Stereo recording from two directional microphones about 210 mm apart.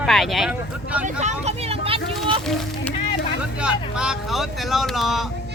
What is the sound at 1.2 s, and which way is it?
Vehicle, 30° right (ahead or behind).